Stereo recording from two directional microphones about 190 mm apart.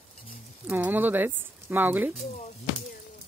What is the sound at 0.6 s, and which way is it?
Speech, 10° right (ahead or behind).